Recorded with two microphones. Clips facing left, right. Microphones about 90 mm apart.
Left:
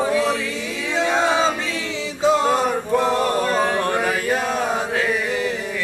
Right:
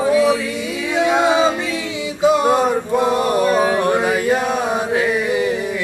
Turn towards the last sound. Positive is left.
turn(degrees=-20)  # may be behind; listen again after turning